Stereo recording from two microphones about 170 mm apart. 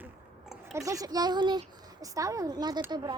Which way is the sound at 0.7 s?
20° right (ahead or behind).